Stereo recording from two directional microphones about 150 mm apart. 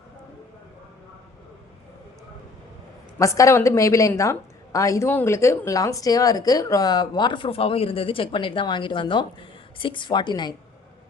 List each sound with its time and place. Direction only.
3.2 s a woman's voice: 20° left (ahead or behind)